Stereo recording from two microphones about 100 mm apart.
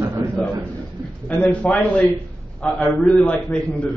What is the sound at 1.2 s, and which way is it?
A man's voice, 15° left (ahead or behind).